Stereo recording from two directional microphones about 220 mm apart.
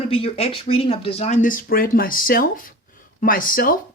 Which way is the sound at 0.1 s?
25° left (ahead or behind).